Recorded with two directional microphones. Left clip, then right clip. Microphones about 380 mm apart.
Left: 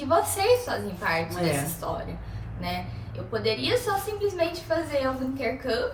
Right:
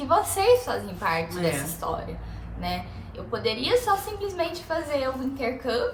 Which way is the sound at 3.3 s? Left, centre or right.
Centre.